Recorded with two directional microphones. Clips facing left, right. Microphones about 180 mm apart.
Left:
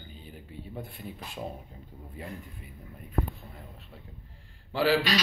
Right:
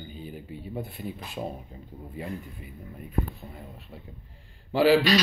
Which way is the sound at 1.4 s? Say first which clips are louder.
Right 3 dB; 20° right (ahead or behind).